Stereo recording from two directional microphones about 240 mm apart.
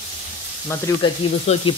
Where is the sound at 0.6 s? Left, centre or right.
Centre.